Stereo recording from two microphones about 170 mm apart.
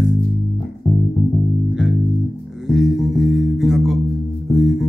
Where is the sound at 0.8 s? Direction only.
35° left (ahead or behind).